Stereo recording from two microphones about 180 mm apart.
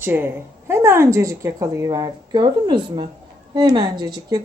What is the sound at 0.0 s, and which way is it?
A woman's voice, 10° right (ahead or behind).